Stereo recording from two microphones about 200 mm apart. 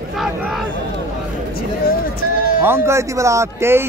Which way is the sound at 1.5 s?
50° left (ahead or behind).